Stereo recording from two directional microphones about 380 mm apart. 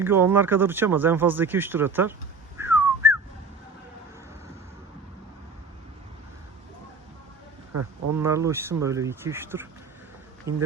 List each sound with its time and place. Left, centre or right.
0.0 s speech: centre
2.6 s whistling: centre
7.7 s speech: right
8.2 s speech: centre